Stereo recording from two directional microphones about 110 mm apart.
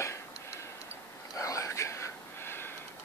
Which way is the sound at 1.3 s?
30° left (ahead or behind).